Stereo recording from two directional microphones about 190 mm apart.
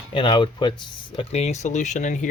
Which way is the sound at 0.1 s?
25° left (ahead or behind).